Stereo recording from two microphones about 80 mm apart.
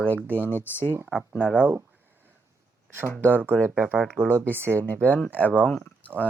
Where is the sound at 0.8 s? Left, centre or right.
Right.